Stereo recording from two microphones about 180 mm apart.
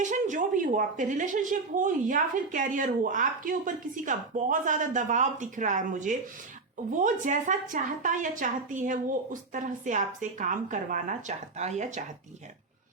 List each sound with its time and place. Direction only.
0.0 s a woman's voice: 45° right (ahead or behind)